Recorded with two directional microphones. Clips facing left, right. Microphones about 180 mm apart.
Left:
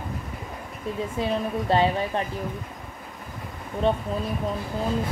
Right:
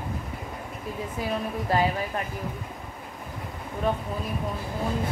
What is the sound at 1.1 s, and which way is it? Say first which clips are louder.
A woman's voice: left 3 dB; 25° left (ahead or behind).